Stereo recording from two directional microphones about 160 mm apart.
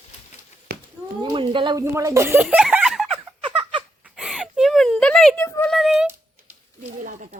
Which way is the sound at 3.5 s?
30° right (ahead or behind).